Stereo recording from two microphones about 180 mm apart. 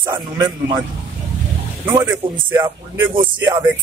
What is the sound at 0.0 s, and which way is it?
Speech, 25° right (ahead or behind).